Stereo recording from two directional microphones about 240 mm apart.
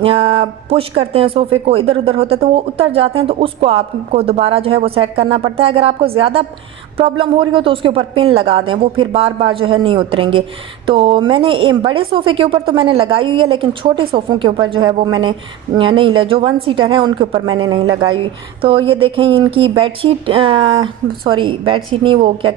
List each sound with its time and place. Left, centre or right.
0.0 s a woman's voice: right